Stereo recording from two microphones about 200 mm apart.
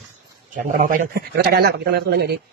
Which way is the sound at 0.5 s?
40° right (ahead or behind).